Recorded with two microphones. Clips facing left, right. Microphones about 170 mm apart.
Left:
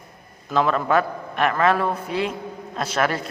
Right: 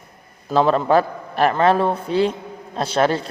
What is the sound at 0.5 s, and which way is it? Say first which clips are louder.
Speech: right 4 dB; 30° right (ahead or behind).